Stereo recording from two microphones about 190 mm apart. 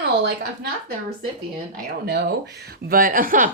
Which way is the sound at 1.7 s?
60° right (ahead or behind).